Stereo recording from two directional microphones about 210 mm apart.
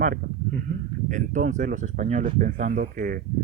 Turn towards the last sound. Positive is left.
turn(degrees=-40)  # may be behind; listen again after turning